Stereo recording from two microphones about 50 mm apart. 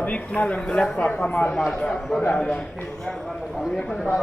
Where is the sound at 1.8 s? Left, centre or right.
Centre.